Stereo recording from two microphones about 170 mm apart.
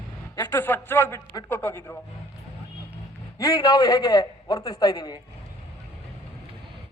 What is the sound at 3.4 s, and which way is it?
A man's voice, 20° left (ahead or behind).